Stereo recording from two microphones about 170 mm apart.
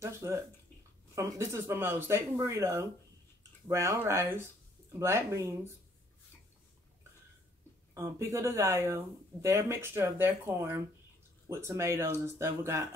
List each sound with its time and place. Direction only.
0.0 s speech: 15° right (ahead or behind)
7.9 s speech: 15° right (ahead or behind)